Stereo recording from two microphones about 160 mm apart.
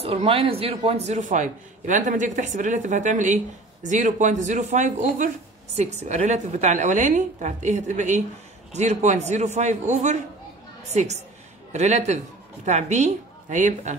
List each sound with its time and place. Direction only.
0.0 s a man's voice: 40° right (ahead or behind)
11.7 s a man's voice: 45° right (ahead or behind)